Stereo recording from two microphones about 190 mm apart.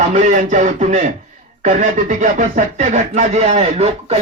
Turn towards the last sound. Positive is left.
turn(degrees=-35)  # may be behind; listen again after turning